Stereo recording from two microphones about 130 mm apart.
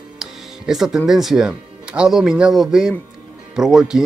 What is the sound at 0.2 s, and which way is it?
Speech, 5° right (ahead or behind).